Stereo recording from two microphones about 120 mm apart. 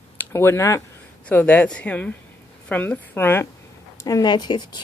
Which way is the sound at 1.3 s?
15° left (ahead or behind).